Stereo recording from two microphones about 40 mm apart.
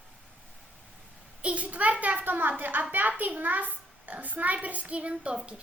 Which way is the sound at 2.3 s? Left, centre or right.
Right.